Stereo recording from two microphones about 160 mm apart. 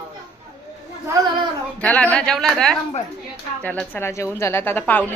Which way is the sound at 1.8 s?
10° left (ahead or behind).